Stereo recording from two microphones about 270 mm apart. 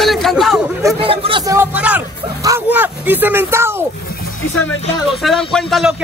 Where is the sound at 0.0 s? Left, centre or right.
Centre.